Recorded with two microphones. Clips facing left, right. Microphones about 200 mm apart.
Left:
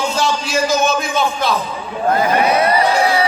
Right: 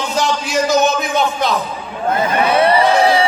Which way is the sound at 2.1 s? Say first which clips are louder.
Left 1 dB; 25° right (ahead or behind).